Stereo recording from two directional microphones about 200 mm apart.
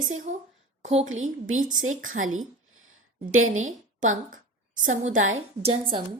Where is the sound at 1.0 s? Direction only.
90° right.